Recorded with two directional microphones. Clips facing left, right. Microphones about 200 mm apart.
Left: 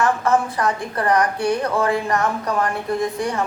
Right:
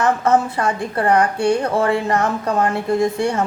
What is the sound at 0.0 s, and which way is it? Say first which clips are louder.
A woman's voice: right 2 dB; 25° right (ahead or behind).